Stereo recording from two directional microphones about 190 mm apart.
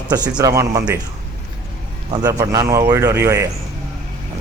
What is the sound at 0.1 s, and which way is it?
Speech, 20° right (ahead or behind).